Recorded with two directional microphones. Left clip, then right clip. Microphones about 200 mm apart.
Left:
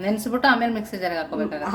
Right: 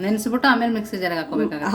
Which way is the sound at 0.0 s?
10° right (ahead or behind).